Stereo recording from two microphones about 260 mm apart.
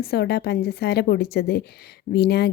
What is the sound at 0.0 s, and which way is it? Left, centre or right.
Speech, left.